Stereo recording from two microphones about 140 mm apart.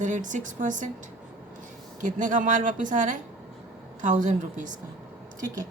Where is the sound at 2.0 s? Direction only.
65° right (ahead or behind).